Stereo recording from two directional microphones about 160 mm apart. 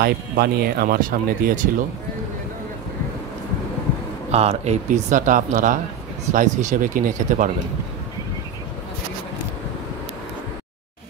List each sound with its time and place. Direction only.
0.0 s speech: 75° right (ahead or behind); by 1.7 s 60° right (ahead or behind)
4.3 s speech: 40° right (ahead or behind)